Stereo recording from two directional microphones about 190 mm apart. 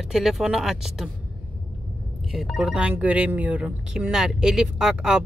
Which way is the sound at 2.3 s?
Centre (ahead or behind).